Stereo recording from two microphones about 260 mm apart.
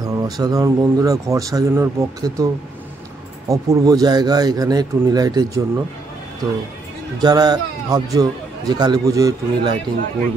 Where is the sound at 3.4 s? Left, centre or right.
Centre.